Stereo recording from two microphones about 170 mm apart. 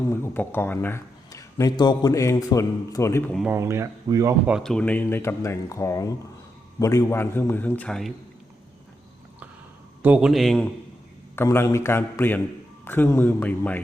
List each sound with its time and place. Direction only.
0.0 s a man's voice: 15° left (ahead or behind)
3.5 s speech: 15° right (ahead or behind)
4.4 s a man's voice: centre (ahead or behind)
10.0 s a man's voice: 5° right (ahead or behind)
11.3 s a man's voice: 15° left (ahead or behind)